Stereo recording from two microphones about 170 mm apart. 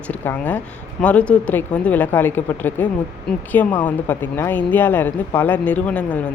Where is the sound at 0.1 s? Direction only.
10° left (ahead or behind).